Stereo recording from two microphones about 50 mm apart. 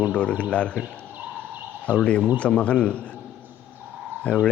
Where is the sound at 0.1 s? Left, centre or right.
Left.